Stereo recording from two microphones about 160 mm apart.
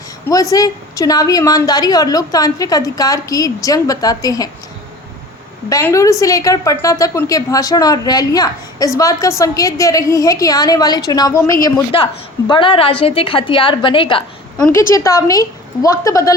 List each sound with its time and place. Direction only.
0.3 s a woman's voice: 20° left (ahead or behind)
5.6 s a woman's voice: 20° left (ahead or behind)
11.9 s a woman's voice: 35° left (ahead or behind)
14.7 s a woman's voice: 20° left (ahead or behind)